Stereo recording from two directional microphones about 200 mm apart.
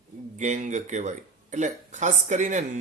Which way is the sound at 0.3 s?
35° right (ahead or behind).